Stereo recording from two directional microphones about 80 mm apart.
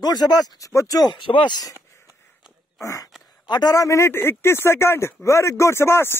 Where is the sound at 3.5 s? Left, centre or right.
Left.